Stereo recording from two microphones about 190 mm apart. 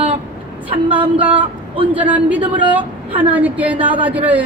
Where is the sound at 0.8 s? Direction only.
10° right (ahead or behind).